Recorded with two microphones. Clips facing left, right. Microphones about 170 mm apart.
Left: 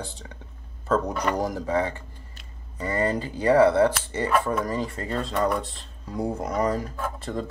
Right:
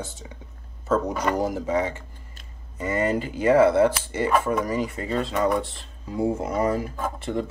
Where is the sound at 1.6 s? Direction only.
20° right (ahead or behind).